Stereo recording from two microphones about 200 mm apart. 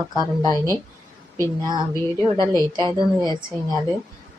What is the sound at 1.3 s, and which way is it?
Speech, 15° left (ahead or behind).